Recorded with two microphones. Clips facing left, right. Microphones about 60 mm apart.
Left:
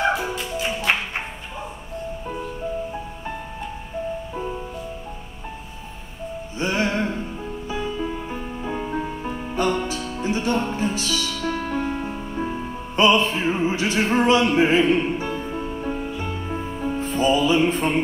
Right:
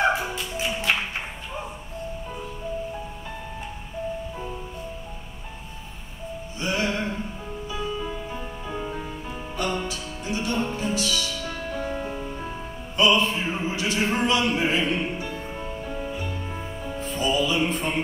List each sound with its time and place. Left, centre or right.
0.9 s music: left
6.6 s music: left
12.0 s music: left